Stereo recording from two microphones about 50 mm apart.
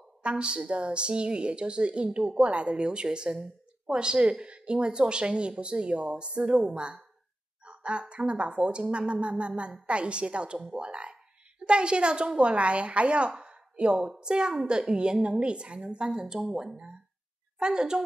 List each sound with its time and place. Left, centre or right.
0.2 s a woman's voice: right